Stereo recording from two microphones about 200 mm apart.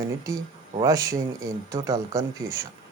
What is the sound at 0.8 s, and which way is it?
Speech, 15° right (ahead or behind).